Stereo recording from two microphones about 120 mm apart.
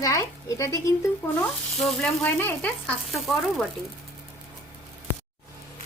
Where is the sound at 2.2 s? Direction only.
15° left (ahead or behind).